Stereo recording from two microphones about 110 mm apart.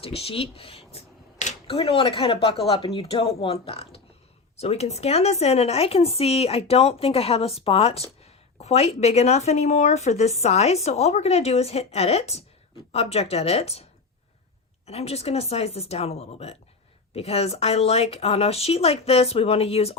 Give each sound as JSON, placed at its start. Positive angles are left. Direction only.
{"t": 0.0, "sound": "speech", "side_deg": 60}
{"t": 14.8, "sound": "speech", "side_deg": 70}